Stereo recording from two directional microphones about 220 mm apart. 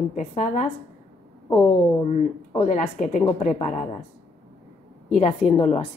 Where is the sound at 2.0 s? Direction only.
30° left (ahead or behind).